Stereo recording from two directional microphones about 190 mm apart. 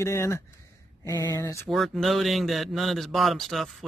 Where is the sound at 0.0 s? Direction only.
15° left (ahead or behind).